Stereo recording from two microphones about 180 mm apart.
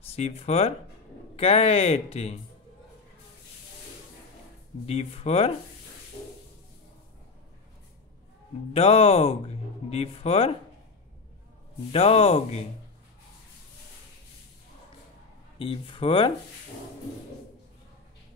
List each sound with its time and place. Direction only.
0.0 s speech: 35° left (ahead or behind)
4.8 s speech: 35° left (ahead or behind)
8.7 s speech: 35° left (ahead or behind)
11.9 s speech: 35° left (ahead or behind)
15.6 s speech: 30° left (ahead or behind)